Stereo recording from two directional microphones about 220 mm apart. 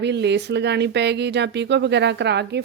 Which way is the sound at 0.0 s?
50° right (ahead or behind).